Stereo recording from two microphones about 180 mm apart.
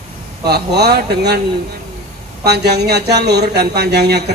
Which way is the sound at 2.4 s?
65° right (ahead or behind).